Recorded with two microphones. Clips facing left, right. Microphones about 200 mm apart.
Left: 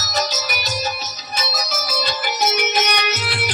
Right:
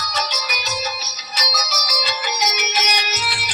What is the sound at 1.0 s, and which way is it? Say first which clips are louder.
Music: left 2 dB; 50° left (ahead or behind).